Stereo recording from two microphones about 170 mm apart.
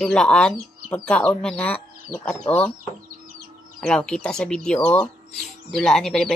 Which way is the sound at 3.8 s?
5° left (ahead or behind).